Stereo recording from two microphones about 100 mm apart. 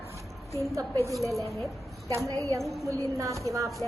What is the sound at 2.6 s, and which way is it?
Speech, centre (ahead or behind).